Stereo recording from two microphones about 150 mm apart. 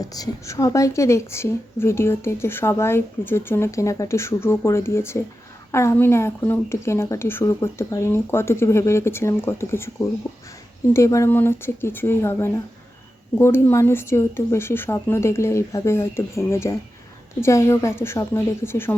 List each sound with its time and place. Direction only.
0.0 s a woman's voice: 25° left (ahead or behind)